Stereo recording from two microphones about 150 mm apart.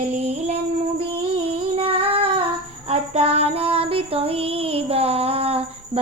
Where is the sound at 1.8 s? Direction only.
40° right (ahead or behind).